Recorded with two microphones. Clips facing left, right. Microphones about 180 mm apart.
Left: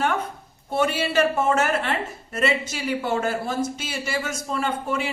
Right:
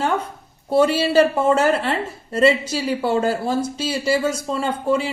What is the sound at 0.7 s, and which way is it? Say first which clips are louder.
A woman's voice: right 7 dB; 30° right (ahead or behind).